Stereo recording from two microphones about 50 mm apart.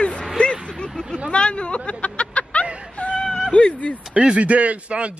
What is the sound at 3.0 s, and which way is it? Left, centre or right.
Cat, left.